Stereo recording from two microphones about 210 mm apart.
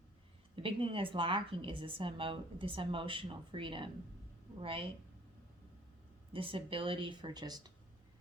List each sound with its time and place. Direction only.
0.5 s a woman's voice: 25° right (ahead or behind)
6.3 s a woman's voice: 25° right (ahead or behind)